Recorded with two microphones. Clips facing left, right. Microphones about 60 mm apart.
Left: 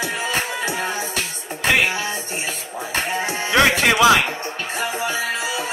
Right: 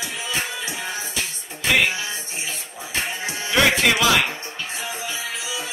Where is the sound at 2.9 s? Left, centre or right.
Left.